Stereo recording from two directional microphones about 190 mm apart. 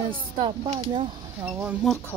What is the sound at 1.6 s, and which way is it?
Speech, 5° right (ahead or behind).